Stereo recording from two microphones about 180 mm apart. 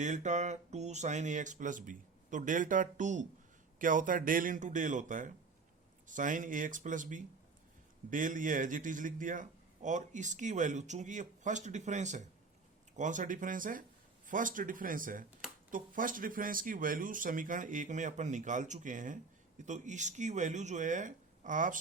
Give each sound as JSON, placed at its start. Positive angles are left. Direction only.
{"t": 0.0, "sound": "speech", "side_deg": -40}